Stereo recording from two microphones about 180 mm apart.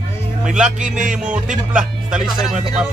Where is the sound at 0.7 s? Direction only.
45° right (ahead or behind).